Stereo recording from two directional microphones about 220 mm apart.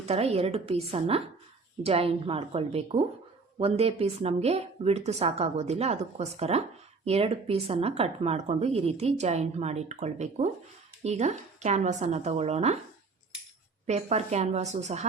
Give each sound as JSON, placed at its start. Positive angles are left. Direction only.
{"t": 0.1, "sound": "a woman's voice", "side_deg": -25}
{"t": 13.8, "sound": "a woman's voice", "side_deg": -30}